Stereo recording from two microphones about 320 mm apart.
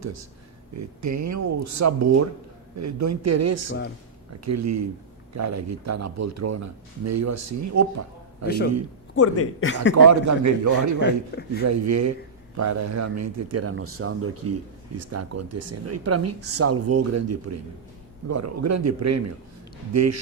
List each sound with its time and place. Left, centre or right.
0.0 s speech: right
8.4 s speech: left
9.1 s speech: left
9.9 s speech: right
11.0 s a man's voice: left
11.6 s speech: right